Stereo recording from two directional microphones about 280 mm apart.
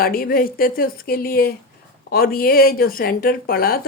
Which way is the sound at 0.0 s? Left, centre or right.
Left.